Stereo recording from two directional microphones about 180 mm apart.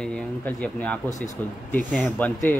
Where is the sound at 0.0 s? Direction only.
5° left (ahead or behind).